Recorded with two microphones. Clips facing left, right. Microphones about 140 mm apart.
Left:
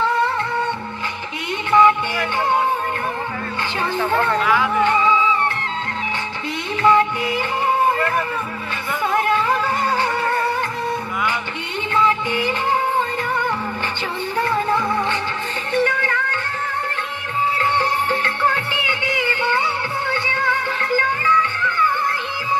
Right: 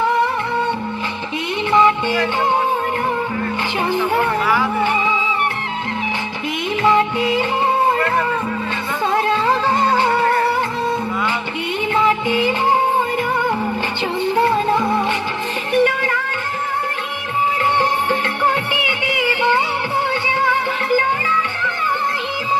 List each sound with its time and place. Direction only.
1.7 s music: 20° right (ahead or behind)
3.9 s speech: 15° right (ahead or behind)
6.8 s music: 20° right (ahead or behind)
9.1 s music: 30° right (ahead or behind)
11.9 s music: 20° right (ahead or behind)
14.2 s music: 15° right (ahead or behind)
17.7 s music: 20° right (ahead or behind)